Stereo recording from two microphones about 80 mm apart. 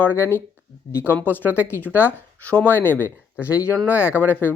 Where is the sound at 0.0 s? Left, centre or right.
Left.